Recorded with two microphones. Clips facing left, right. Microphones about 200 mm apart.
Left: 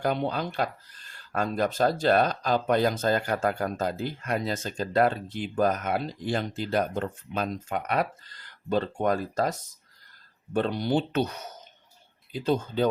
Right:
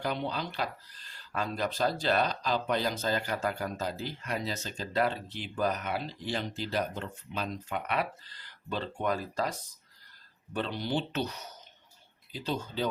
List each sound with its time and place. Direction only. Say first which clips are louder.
0.0 s speech: left 6 dB; 50° left (ahead or behind)